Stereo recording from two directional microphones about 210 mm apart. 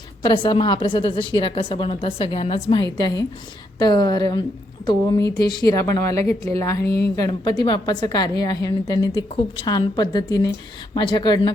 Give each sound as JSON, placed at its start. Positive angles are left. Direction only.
{"t": 0.2, "sound": "a woman's voice", "side_deg": 25}